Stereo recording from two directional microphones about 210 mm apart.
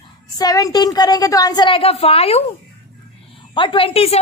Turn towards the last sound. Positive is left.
turn(degrees=30)  # may be behind; listen again after turning